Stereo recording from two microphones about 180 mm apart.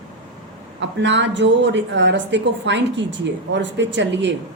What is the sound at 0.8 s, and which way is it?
A woman's voice, 80° right.